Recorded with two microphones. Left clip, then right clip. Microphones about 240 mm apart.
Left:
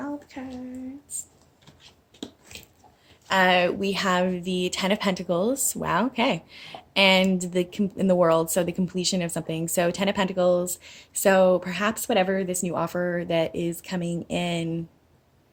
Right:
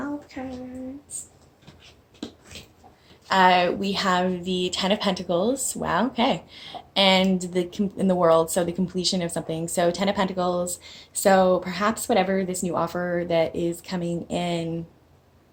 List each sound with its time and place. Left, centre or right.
0.4 s a woman's voice: left
3.2 s a woman's voice: left